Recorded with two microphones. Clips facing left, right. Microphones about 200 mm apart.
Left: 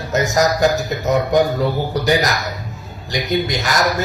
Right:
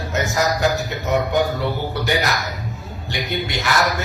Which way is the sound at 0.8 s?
40° left (ahead or behind).